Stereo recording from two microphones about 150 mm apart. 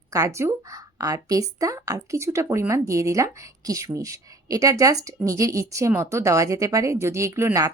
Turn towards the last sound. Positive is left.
turn(degrees=-20)  # may be behind; listen again after turning